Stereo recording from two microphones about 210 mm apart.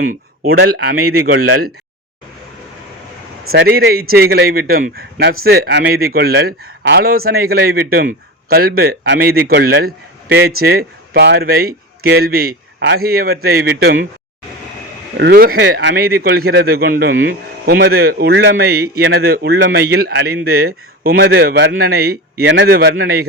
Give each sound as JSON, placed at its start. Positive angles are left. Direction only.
{"t": 0.5, "sound": "a man's voice", "side_deg": -50}
{"t": 3.5, "sound": "a man's voice", "side_deg": -50}
{"t": 15.2, "sound": "a man's voice", "side_deg": -45}